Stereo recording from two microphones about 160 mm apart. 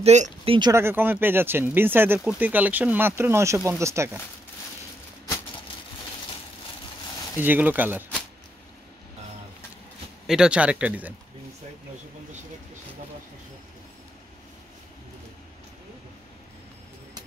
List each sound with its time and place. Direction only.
0.0 s speech: 45° right (ahead or behind)
0.6 s speech: 20° right (ahead or behind)
7.3 s speech: 10° right (ahead or behind)
10.2 s speech: 5° right (ahead or behind)